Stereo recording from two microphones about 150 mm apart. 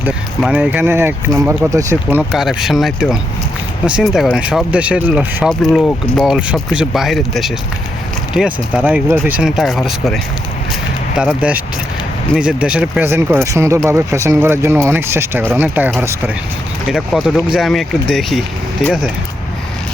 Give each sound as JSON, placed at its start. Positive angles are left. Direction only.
{"t": 0.0, "sound": "speech", "side_deg": -10}
{"t": 2.3, "sound": "speech", "side_deg": 0}
{"t": 16.9, "sound": "speech", "side_deg": 0}